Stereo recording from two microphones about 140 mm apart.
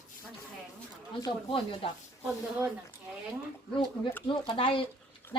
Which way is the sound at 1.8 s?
40° left (ahead or behind).